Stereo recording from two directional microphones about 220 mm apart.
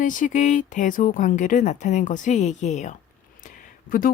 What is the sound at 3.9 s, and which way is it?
Speech, 60° left (ahead or behind).